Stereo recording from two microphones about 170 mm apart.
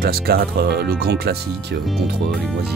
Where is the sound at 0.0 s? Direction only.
65° right (ahead or behind).